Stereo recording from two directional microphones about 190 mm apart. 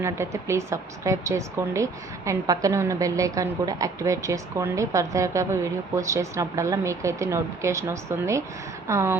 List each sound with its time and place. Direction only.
0.0 s a woman's voice: 15° right (ahead or behind)